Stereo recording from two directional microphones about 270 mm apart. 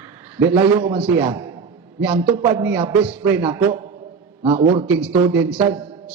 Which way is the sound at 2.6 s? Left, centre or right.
Centre.